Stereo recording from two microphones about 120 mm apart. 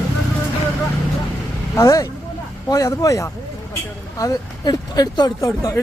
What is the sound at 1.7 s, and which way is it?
Speech, 30° left (ahead or behind).